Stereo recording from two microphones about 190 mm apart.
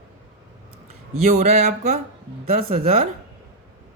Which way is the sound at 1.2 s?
35° right (ahead or behind).